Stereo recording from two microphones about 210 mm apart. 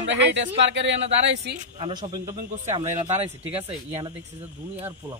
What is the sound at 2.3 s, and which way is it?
Speech, 30° right (ahead or behind).